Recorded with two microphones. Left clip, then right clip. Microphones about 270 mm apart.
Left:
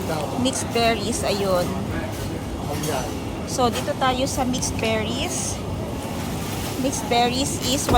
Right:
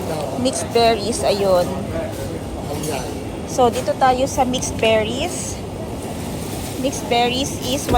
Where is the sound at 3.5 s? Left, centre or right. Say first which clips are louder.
Right 6 dB; centre.